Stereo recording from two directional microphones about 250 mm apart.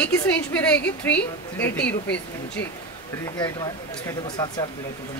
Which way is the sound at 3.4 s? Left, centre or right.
Centre.